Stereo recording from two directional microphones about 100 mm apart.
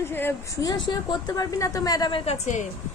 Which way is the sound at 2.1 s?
65° left (ahead or behind).